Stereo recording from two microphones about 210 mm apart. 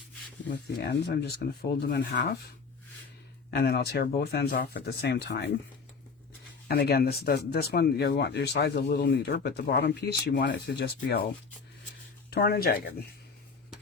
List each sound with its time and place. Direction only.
0.8 s speech: 50° left (ahead or behind)
3.5 s speech: 50° left (ahead or behind)
6.7 s speech: 45° left (ahead or behind)
12.3 s speech: 45° left (ahead or behind)